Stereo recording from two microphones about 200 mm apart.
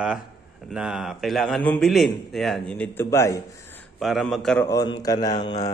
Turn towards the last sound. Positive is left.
turn(degrees=20)  # may be behind; listen again after turning